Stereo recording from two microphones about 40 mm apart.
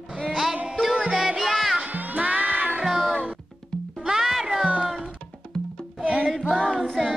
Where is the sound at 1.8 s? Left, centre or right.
Right.